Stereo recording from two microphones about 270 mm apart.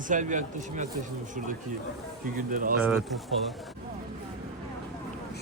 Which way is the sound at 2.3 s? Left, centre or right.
Right.